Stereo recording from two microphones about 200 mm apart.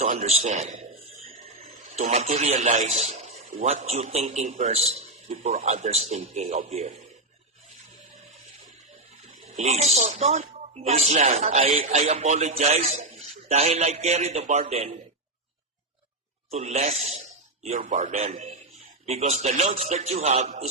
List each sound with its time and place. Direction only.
0.0 s a man's voice: 35° right (ahead or behind)
9.5 s speech: 35° right (ahead or behind)
16.5 s speech: 35° right (ahead or behind)